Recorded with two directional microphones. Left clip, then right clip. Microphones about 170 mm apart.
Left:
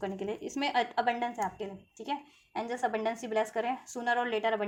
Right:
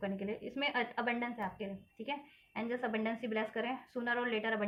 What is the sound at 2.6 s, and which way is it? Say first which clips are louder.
Speech: left 5 dB; 40° left (ahead or behind).